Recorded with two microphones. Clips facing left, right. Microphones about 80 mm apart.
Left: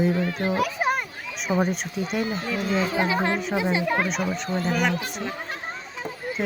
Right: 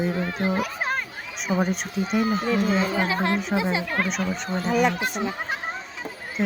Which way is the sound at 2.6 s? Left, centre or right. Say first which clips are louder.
Right 1 dB; centre.